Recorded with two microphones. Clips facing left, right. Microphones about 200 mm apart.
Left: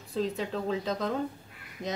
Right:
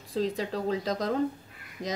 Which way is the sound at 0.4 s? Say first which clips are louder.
Right 1 dB; 40° right (ahead or behind).